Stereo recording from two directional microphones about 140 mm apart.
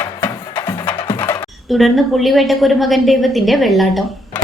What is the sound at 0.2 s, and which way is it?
Music, 15° left (ahead or behind).